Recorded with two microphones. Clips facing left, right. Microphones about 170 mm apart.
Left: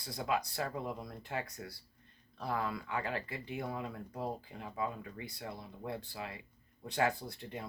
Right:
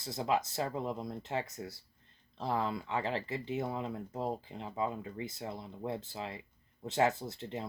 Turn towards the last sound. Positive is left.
turn(degrees=-25)  # may be behind; listen again after turning